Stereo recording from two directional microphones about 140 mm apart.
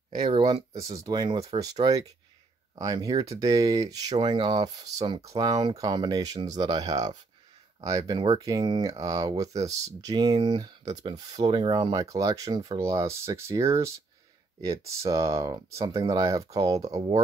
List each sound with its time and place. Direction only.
0.2 s speech: 35° right (ahead or behind)
0.7 s speech: 25° right (ahead or behind)
5.0 s speech: 45° right (ahead or behind)
5.3 s speech: 25° right (ahead or behind)